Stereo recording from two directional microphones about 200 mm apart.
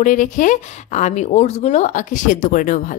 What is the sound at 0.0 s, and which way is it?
A woman's voice, 40° left (ahead or behind).